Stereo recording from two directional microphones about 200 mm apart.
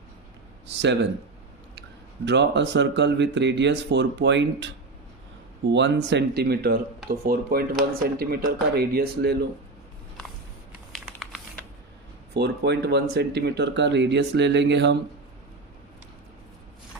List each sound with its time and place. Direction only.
2.2 s speech: 60° right (ahead or behind)
10.9 s typing: centre (ahead or behind)
12.3 s speech: 55° right (ahead or behind)